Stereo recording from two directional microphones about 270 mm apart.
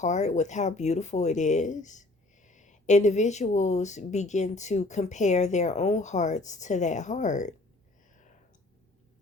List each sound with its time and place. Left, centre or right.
0.0 s speech: left